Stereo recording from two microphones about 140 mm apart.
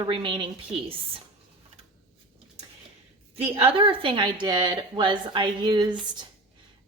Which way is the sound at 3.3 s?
45° right (ahead or behind).